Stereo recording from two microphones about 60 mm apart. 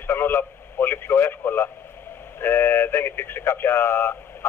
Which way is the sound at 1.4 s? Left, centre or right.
Left.